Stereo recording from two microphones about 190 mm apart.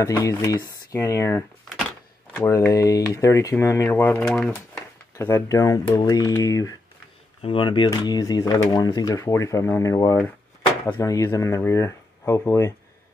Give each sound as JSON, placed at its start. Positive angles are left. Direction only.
{"t": 0.0, "sound": "speech", "side_deg": 15}